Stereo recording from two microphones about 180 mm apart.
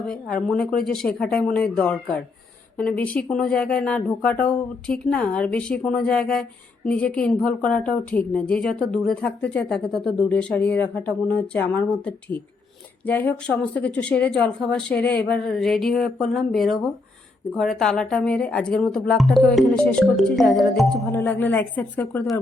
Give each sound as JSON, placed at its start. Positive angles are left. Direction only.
{"t": 0.1, "sound": "a woman's voice", "side_deg": 5}
{"t": 21.1, "sound": "a woman's voice", "side_deg": 10}